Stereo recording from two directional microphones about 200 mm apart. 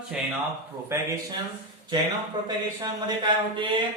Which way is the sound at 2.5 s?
20° right (ahead or behind).